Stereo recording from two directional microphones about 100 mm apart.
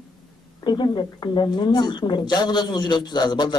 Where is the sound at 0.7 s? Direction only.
45° left (ahead or behind).